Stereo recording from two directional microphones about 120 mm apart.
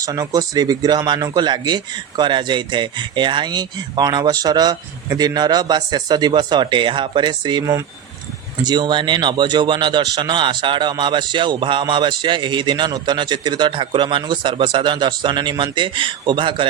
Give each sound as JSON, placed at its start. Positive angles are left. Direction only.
{"t": 0.0, "sound": "speech", "side_deg": -30}